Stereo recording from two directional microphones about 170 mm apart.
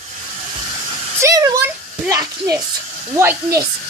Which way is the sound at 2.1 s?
20° right (ahead or behind).